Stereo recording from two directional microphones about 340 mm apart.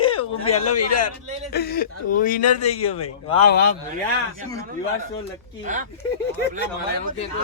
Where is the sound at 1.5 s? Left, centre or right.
Left.